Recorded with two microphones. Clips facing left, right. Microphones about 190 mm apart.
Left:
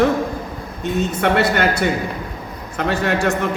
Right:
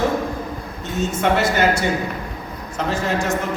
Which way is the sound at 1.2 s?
60° left (ahead or behind).